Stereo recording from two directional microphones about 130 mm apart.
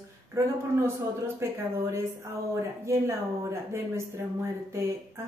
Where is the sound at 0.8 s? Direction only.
20° right (ahead or behind).